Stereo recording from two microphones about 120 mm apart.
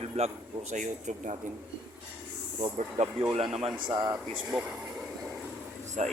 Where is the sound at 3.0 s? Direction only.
80° right.